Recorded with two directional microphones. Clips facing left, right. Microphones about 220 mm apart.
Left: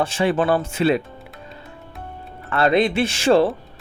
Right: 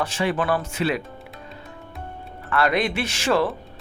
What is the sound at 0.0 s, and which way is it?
Speech, 30° left (ahead or behind).